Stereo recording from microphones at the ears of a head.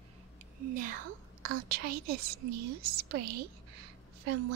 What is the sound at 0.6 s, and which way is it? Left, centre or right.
A woman's voice, right.